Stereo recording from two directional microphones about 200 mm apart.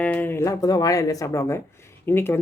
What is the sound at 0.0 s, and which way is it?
Speech, 10° left (ahead or behind).